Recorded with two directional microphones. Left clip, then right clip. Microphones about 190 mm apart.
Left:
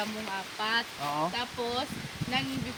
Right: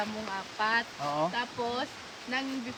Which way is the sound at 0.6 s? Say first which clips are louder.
Right 2 dB; 15° left (ahead or behind).